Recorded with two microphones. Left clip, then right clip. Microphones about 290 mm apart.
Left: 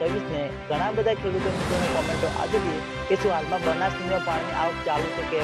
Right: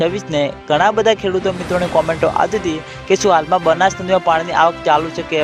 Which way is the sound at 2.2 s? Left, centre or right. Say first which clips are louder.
Right 10 dB; right.